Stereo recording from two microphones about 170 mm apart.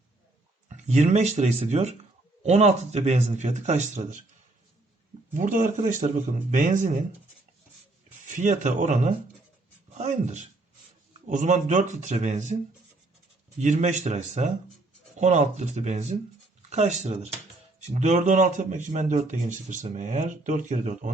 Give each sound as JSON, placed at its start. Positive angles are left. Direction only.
{"t": 0.7, "sound": "speech", "side_deg": -45}
{"t": 5.3, "sound": "a man's voice", "side_deg": -50}
{"t": 8.3, "sound": "a man's voice", "side_deg": -45}
{"t": 13.6, "sound": "a man's voice", "side_deg": -45}